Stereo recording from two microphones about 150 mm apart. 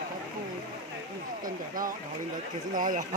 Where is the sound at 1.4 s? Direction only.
65° right (ahead or behind).